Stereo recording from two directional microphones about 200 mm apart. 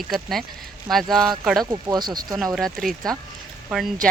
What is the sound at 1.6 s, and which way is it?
Speech, 15° right (ahead or behind).